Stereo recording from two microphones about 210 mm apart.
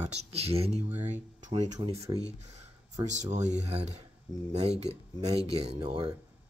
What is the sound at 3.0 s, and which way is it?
Speech, 35° right (ahead or behind).